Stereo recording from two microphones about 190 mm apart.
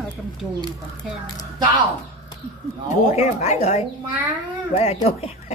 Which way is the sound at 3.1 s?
35° left (ahead or behind).